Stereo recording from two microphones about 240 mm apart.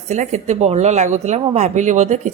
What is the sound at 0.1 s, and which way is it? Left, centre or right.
Speech, right.